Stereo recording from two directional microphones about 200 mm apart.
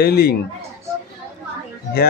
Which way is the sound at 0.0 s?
50° left (ahead or behind).